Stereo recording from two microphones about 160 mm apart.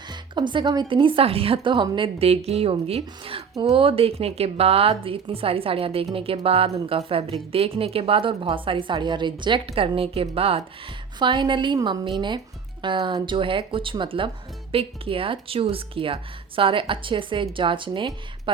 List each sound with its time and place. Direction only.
0.1 s a woman's voice: 30° right (ahead or behind)